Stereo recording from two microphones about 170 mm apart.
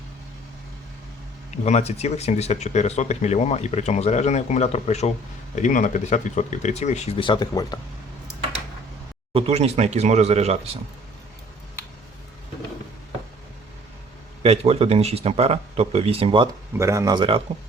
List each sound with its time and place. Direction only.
1.5 s speech: 40° left (ahead or behind); by 7.8 s 25° left (ahead or behind)
9.3 s speech: 40° right (ahead or behind)
14.4 s speech: 35° right (ahead or behind)
16.7 s speech: 15° right (ahead or behind)